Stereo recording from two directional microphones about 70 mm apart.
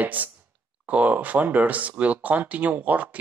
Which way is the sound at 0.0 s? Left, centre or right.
Right.